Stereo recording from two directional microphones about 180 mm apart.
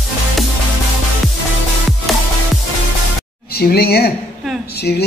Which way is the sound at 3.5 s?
60° left (ahead or behind).